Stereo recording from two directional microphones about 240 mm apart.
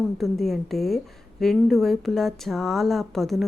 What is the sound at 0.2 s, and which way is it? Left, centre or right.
A woman's voice, centre.